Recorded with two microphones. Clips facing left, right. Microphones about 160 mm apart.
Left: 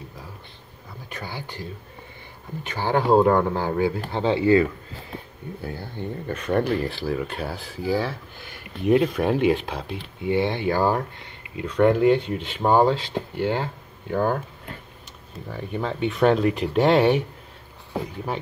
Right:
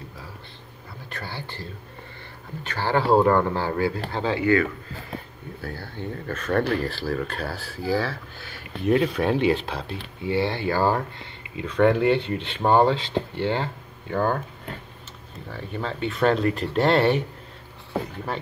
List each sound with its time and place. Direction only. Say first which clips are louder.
1.1 s speech: left 1 dB; 15° left (ahead or behind)
5.6 s speech: left 1 dB; 20° left (ahead or behind)
15.5 s speech: left 3 dB; 15° left (ahead or behind)